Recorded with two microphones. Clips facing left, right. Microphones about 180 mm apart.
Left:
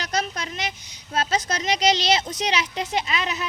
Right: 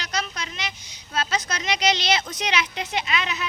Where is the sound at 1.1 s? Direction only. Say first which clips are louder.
Left 3 dB; 45° left (ahead or behind).